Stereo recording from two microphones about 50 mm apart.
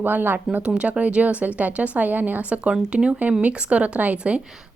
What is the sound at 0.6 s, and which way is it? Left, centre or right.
Speech, right.